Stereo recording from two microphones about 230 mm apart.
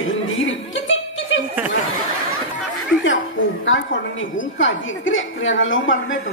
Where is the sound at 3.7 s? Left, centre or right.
Left.